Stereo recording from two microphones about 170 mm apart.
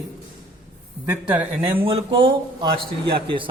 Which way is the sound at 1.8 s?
30° right (ahead or behind).